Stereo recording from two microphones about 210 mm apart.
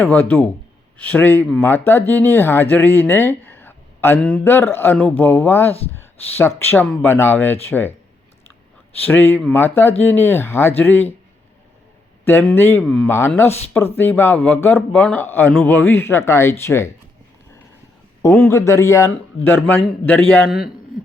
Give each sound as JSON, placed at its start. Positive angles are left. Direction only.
{"t": 0.0, "sound": "speech", "side_deg": 10}
{"t": 6.0, "sound": "a sound", "side_deg": 10}
{"t": 6.6, "sound": "speech", "side_deg": 10}
{"t": 9.0, "sound": "speech", "side_deg": 10}
{"t": 12.2, "sound": "speech", "side_deg": 10}
{"t": 18.2, "sound": "speech", "side_deg": 10}